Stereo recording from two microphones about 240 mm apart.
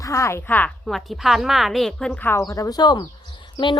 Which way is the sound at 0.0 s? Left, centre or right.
Centre.